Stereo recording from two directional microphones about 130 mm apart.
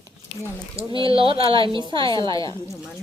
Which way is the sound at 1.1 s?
45° right (ahead or behind).